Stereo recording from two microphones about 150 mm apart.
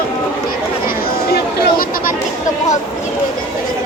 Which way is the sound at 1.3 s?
80° left.